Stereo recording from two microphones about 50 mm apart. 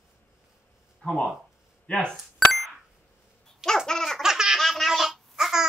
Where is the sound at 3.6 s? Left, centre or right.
Centre.